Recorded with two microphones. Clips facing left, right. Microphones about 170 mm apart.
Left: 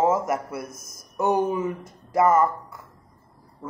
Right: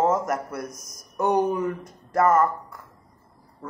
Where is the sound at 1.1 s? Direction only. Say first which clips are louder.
Even; 5° left (ahead or behind).